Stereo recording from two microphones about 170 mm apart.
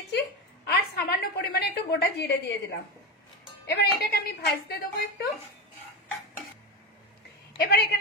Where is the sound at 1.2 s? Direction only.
65° left (ahead or behind).